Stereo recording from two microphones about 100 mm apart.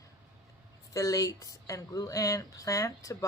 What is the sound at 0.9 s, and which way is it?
Speech, 35° left (ahead or behind).